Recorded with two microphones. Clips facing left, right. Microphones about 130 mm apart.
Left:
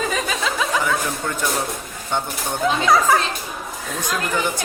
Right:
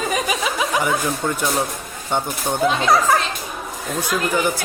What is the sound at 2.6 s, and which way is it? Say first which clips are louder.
Speech: right 1 dB; 5° right (ahead or behind).